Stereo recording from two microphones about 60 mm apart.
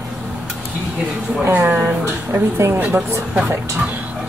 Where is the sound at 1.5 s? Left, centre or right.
Right.